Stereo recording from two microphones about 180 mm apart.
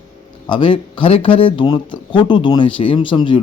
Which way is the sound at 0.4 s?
25° left (ahead or behind).